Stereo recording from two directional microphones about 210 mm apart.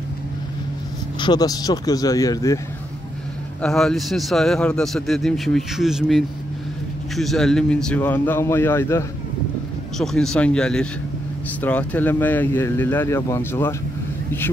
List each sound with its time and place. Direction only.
1.2 s speech: 20° left (ahead or behind)
3.6 s a man's voice: centre (ahead or behind)
9.9 s a man's voice: centre (ahead or behind)